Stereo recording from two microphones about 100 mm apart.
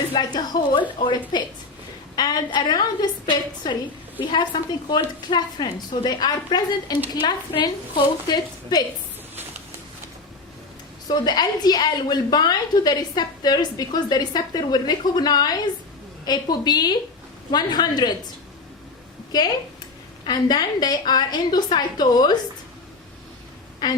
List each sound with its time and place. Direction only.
0.3 s a woman's voice: 45° left (ahead or behind)
2.1 s a woman's voice: 45° left (ahead or behind)
11.1 s a woman's voice: 45° left (ahead or behind)
19.3 s a woman's voice: 40° left (ahead or behind)
23.8 s a woman's voice: 40° left (ahead or behind)